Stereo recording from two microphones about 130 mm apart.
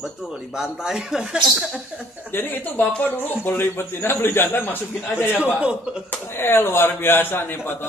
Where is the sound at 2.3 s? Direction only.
15° left (ahead or behind).